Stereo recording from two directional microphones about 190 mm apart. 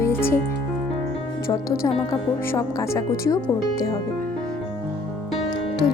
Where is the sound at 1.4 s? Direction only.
20° left (ahead or behind).